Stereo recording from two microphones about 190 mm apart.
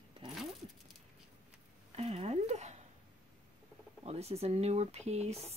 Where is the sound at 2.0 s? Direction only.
30° right (ahead or behind).